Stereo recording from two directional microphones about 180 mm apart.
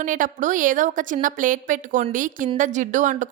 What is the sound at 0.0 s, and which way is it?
A woman's voice, 45° right (ahead or behind).